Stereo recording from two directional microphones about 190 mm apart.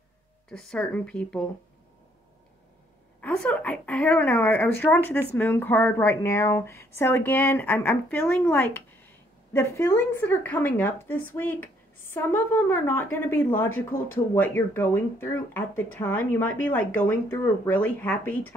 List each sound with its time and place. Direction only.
0.5 s speech: 5° left (ahead or behind)
3.2 s speech: 5° left (ahead or behind)